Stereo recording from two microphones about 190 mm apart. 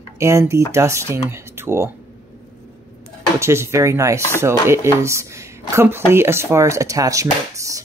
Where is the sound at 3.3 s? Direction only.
15° right (ahead or behind).